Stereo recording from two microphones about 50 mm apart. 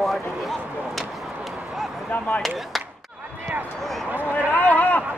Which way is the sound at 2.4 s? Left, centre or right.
Centre.